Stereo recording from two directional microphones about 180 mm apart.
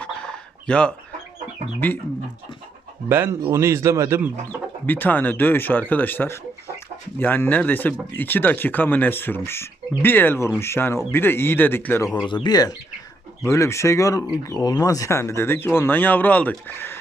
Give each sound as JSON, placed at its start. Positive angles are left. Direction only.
{"t": 0.0, "sound": "a sound", "side_deg": 5}
{"t": 3.1, "sound": "speech", "side_deg": -15}
{"t": 4.9, "sound": "speech", "side_deg": 10}